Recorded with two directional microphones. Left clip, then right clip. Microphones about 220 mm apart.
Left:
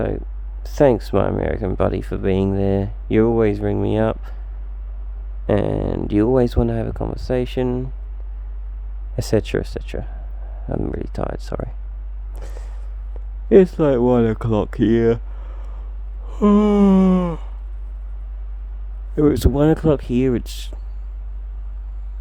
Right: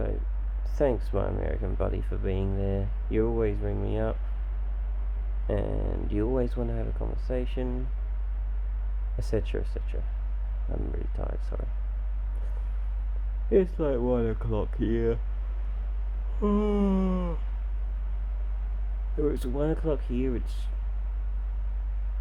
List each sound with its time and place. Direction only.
0.6 s speech: 45° left (ahead or behind)
5.5 s speech: 45° left (ahead or behind)
9.1 s speech: 45° left (ahead or behind)
13.5 s speech: 45° left (ahead or behind)
16.4 s speech: 45° left (ahead or behind)
19.2 s speech: 45° left (ahead or behind)